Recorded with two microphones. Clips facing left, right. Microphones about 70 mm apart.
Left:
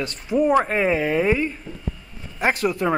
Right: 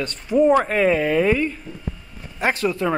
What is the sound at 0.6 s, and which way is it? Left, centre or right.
Speech, centre.